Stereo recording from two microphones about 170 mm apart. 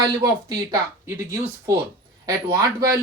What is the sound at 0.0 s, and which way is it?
Speech, 20° right (ahead or behind).